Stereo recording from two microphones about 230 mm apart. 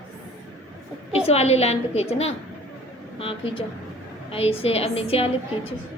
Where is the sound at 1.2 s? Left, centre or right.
Left.